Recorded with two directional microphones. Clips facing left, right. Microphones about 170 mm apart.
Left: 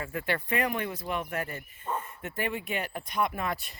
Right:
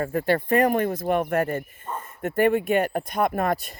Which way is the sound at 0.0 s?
40° right (ahead or behind).